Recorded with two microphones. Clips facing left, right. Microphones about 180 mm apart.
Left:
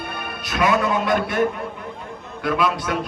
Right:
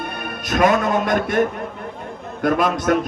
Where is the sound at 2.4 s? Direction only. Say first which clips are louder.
Right 3 dB; 45° right (ahead or behind).